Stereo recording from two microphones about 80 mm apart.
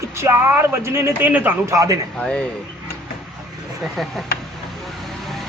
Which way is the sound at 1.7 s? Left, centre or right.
Right.